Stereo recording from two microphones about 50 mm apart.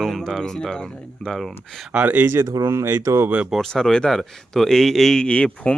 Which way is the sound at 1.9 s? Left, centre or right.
Right.